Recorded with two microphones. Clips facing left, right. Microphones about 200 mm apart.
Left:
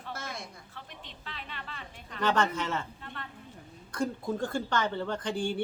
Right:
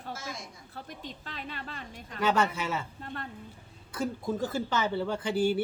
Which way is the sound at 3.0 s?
40° right (ahead or behind).